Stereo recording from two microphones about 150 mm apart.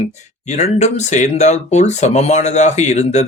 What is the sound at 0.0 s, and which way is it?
Speech, 50° left (ahead or behind).